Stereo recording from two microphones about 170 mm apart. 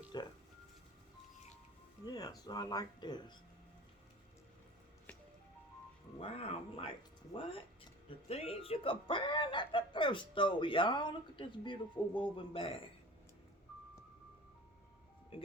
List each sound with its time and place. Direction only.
0.1 s speech: 25° left (ahead or behind)
2.0 s speech: 20° left (ahead or behind)
6.1 s speech: 35° left (ahead or behind)
8.3 s speech: 35° left (ahead or behind)
15.3 s speech: 30° left (ahead or behind)